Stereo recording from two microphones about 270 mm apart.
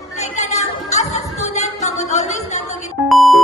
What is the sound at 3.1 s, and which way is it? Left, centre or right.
Music, centre.